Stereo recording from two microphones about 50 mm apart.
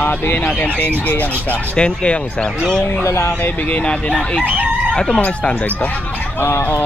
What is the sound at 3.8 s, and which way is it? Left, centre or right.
Speech, left.